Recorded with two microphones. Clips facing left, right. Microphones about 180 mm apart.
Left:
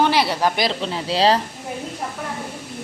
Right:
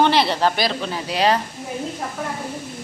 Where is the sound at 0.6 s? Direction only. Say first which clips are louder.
Left 1 dB; 25° left (ahead or behind).